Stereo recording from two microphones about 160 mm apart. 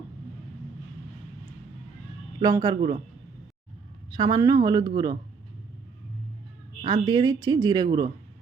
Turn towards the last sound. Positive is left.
turn(degrees=-25)  # may be behind; listen again after turning